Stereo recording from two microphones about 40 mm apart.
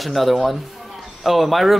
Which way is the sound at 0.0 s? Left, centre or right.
Centre.